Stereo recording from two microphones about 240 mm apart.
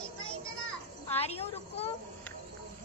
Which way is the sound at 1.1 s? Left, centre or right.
Left.